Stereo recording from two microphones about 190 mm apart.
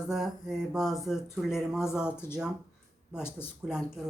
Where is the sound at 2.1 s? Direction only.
10° left (ahead or behind).